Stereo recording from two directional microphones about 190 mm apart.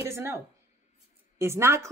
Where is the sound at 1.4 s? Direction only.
15° right (ahead or behind).